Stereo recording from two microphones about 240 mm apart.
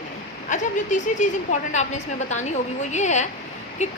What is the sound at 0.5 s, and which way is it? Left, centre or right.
A woman's voice, left.